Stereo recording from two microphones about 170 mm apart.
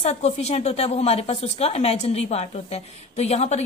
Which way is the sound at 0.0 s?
40° left (ahead or behind).